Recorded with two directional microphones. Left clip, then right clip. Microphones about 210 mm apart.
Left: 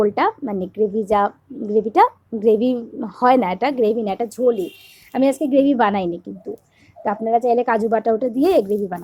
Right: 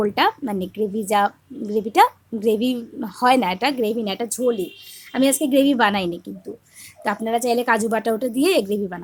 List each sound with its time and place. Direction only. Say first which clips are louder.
0.0 s a woman's voice: left 1 dB; centre (ahead or behind)